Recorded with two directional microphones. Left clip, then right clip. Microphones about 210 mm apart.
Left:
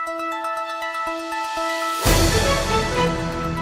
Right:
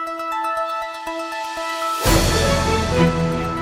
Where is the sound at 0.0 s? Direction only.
Centre (ahead or behind).